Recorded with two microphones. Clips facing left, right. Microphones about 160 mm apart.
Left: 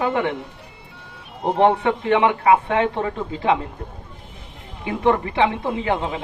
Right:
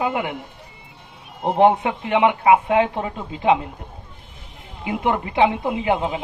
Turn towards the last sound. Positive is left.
turn(degrees=-15)  # may be behind; listen again after turning